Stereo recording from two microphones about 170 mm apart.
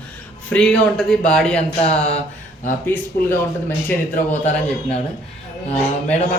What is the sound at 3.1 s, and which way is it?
Speech, 65° left (ahead or behind).